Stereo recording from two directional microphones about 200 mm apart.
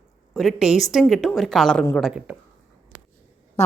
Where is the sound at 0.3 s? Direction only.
Centre (ahead or behind).